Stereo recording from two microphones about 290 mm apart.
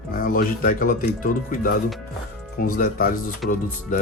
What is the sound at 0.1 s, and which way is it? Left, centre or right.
Speech, left.